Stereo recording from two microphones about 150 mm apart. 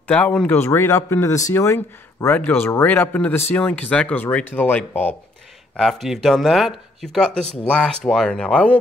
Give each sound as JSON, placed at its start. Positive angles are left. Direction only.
{"t": 0.0, "sound": "speech", "side_deg": 10}
{"t": 6.0, "sound": "speech", "side_deg": 0}